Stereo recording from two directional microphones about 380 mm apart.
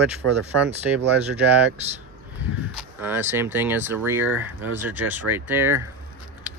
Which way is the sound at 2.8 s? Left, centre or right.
Centre.